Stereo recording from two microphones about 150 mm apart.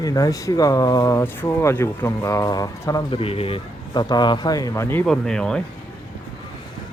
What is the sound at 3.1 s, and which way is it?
Speech, 40° left (ahead or behind).